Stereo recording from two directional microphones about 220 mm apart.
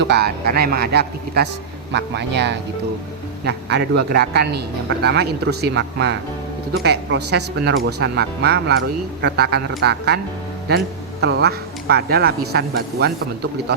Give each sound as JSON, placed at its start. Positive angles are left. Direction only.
{"t": 0.1, "sound": "a man's voice", "side_deg": -45}
{"t": 11.2, "sound": "a man's voice", "side_deg": -50}